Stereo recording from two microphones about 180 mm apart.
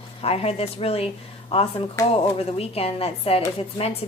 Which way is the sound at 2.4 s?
35° left (ahead or behind).